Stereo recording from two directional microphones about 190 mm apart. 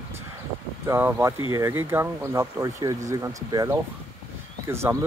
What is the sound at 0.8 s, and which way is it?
Speech, 15° right (ahead or behind).